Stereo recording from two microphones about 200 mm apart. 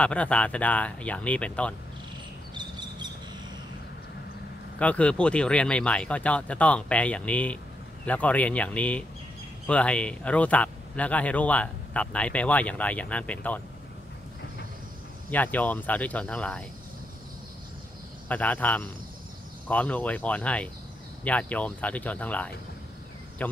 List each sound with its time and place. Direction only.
0.0 s speech: 5° left (ahead or behind)
2.5 s a sound: 20° right (ahead or behind)
4.7 s speech: 5° left (ahead or behind)
15.3 s speech: 10° left (ahead or behind)
18.3 s speech: 10° left (ahead or behind)